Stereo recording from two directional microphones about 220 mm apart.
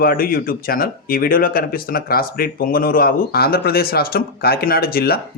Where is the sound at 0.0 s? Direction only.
40° left (ahead or behind).